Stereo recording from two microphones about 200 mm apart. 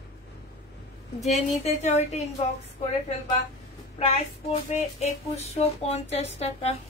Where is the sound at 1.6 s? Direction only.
35° left (ahead or behind).